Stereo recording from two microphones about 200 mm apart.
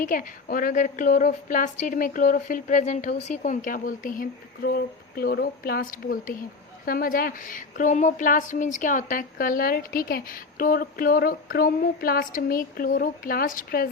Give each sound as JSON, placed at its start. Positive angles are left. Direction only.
{"t": 0.0, "sound": "a woman's voice", "side_deg": 40}